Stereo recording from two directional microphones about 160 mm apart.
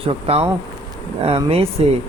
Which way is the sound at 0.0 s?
35° right (ahead or behind).